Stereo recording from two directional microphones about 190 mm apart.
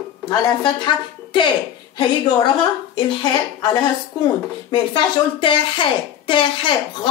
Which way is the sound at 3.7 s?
20° left (ahead or behind).